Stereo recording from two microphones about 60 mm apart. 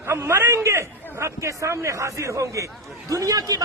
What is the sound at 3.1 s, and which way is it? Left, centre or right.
Speech, right.